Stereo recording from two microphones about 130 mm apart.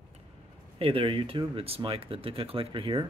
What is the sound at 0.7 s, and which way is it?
Speech, 45° right (ahead or behind).